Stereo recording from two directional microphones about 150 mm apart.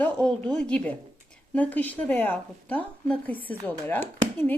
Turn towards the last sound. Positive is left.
turn(degrees=10)  # may be behind; listen again after turning